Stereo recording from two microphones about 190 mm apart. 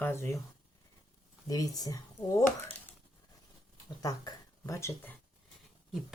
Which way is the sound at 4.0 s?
20° left (ahead or behind).